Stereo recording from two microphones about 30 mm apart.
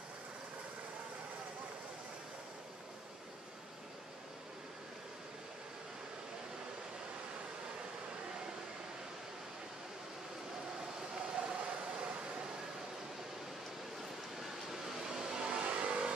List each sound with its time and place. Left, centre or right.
11.3 s a sound: right
15.2 s vehicle: right
15.6 s vehicle: right